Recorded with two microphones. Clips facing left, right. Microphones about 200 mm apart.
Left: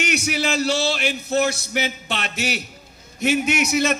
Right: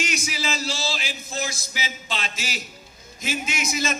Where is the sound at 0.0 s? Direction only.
65° left (ahead or behind).